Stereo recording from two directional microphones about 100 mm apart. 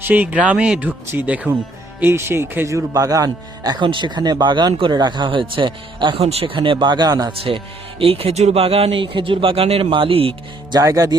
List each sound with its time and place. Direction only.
0.0 s speech: 15° right (ahead or behind); by 6.2 s 55° right (ahead or behind)
6.2 s speech: 65° right (ahead or behind); by 7.3 s 40° right (ahead or behind)
7.3 s speech: 65° right (ahead or behind)
10.7 s speech: 35° right (ahead or behind)